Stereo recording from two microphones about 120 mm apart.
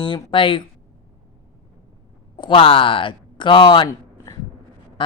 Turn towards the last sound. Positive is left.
turn(degrees=40)  # may be behind; listen again after turning